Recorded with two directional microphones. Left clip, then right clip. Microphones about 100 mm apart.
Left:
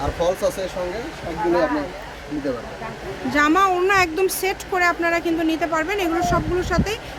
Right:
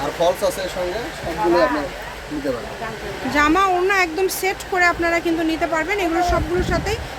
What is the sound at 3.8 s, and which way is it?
Speech, 30° left (ahead or behind).